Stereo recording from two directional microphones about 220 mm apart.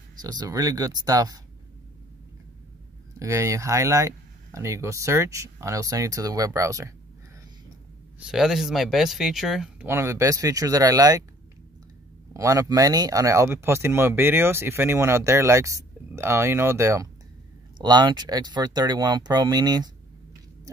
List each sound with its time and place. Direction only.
0.2 s speech: 20° right (ahead or behind)
3.2 s speech: 15° right (ahead or behind)
8.3 s speech: centre (ahead or behind)
12.4 s speech: 15° right (ahead or behind)